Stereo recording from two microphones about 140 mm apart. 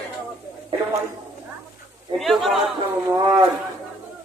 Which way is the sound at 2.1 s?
Centre (ahead or behind).